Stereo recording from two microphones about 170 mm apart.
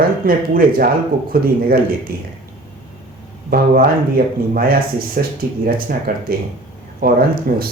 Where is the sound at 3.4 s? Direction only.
60° right (ahead or behind).